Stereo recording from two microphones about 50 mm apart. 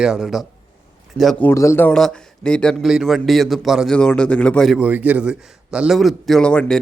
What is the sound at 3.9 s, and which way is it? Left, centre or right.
Speech, centre.